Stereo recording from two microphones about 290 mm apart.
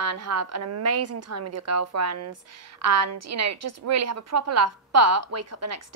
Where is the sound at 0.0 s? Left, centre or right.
Right.